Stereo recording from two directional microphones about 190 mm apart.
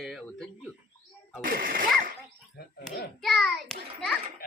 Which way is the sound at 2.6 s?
60° left (ahead or behind).